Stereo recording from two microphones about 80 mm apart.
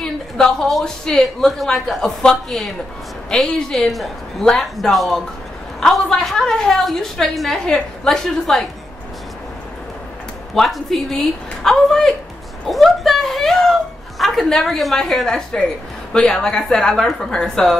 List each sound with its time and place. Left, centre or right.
0.0 s a woman's voice: centre
10.5 s a woman's voice: centre
12.6 s a sound: centre
16.1 s a woman's voice: centre